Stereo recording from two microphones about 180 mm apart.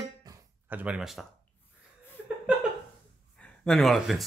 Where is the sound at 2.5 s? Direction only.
5° right (ahead or behind).